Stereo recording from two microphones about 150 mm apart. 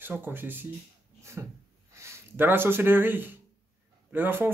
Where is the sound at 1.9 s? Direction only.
20° right (ahead or behind).